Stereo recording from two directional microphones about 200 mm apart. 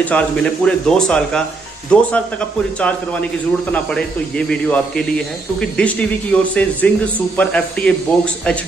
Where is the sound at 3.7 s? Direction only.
5° left (ahead or behind).